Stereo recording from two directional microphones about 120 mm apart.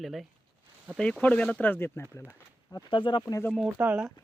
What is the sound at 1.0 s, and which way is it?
Speech, 10° left (ahead or behind).